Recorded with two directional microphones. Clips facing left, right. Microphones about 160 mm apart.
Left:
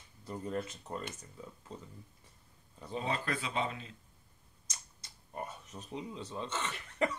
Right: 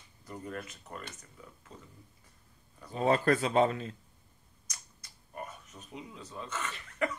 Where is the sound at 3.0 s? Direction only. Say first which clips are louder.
Right 9 dB; 45° right (ahead or behind).